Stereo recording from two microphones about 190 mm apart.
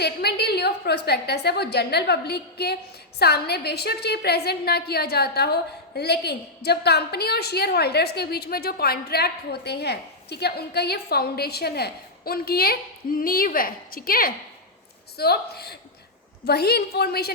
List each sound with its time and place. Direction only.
0.0 s a woman's voice: 60° left (ahead or behind)